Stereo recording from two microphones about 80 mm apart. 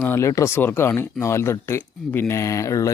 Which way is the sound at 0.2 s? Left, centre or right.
Left.